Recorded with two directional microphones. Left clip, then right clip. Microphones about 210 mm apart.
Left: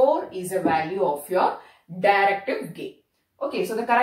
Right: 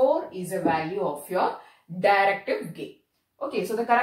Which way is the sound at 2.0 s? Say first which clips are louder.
Left 2 dB; 10° right (ahead or behind).